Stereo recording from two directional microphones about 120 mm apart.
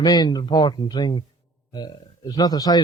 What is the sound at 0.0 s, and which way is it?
Speech, 35° left (ahead or behind).